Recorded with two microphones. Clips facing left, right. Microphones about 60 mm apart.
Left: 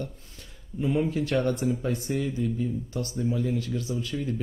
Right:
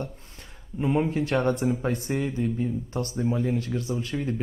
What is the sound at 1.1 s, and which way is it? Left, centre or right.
Speech, right.